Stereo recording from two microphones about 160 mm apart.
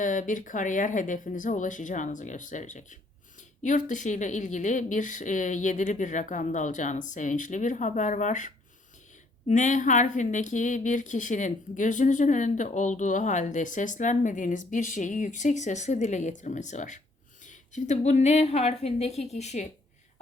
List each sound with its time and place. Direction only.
0.0 s a woman's voice: 55° left (ahead or behind)